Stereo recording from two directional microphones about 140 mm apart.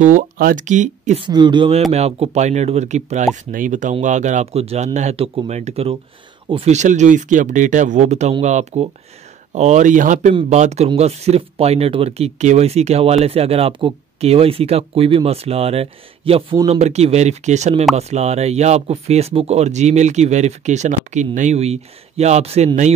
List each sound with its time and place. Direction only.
0.0 s speech: 80° right; by 1.2 s 60° right (ahead or behind)
1.2 s speech: 35° right (ahead or behind)
1.9 s speech: 50° right (ahead or behind)
3.5 s speech: 70° right (ahead or behind)
10.5 s speech: 55° right (ahead or behind)